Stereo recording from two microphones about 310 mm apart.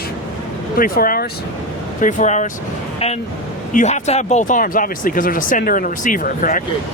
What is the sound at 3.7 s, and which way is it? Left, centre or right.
Speech, left.